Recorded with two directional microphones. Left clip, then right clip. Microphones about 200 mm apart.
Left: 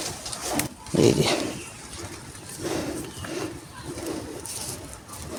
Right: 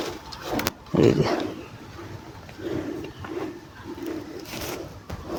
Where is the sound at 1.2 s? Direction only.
25° left (ahead or behind).